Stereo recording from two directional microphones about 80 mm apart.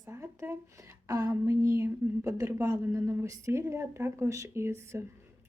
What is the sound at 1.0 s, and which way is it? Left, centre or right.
Speech, right.